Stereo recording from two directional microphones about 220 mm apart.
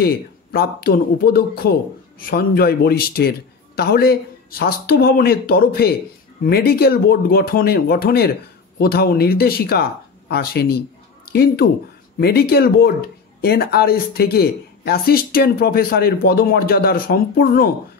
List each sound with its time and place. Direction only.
0.0 s speech: 45° left (ahead or behind)